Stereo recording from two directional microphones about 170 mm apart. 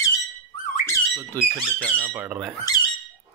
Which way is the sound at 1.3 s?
10° left (ahead or behind).